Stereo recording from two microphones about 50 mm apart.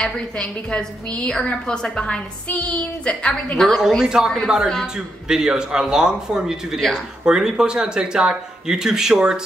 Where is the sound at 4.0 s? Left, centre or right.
Centre.